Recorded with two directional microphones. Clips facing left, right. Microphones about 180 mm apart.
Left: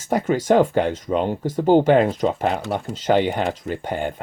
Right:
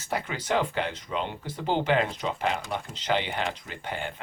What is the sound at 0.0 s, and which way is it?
Speech, 45° left (ahead or behind).